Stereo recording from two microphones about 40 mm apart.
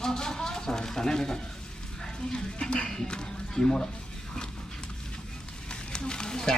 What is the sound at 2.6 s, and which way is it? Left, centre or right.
Speech, left.